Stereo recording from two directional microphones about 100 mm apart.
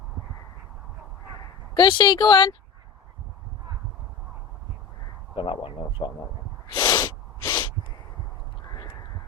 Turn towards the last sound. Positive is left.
turn(degrees=45)  # may be behind; listen again after turning